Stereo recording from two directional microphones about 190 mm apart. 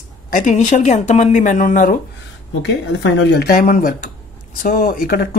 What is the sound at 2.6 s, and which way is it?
Speech, 65° left (ahead or behind).